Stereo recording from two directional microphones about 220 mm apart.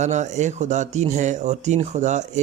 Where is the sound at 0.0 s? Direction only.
30° right (ahead or behind).